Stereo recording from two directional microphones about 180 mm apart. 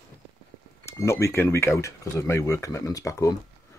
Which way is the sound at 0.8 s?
15° left (ahead or behind).